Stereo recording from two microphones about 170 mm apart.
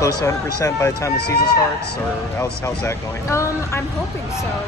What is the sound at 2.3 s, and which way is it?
Speech, 15° left (ahead or behind).